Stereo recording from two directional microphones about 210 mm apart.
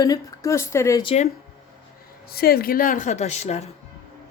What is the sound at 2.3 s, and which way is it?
A woman's voice, 45° left (ahead or behind).